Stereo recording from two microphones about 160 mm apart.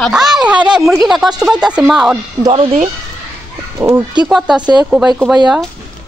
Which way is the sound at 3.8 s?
20° right (ahead or behind).